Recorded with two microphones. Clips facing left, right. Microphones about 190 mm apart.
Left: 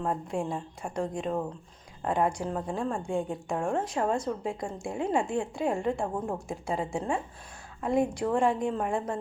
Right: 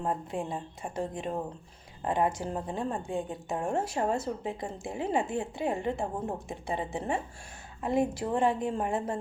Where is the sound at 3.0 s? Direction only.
Centre (ahead or behind).